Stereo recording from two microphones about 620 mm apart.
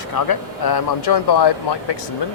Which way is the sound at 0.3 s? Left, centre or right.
Left.